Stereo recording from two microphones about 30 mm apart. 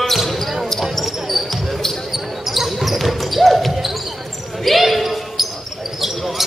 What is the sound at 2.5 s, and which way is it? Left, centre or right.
Basketball bounce, centre.